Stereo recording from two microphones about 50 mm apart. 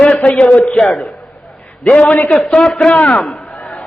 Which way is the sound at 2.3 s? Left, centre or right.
Centre.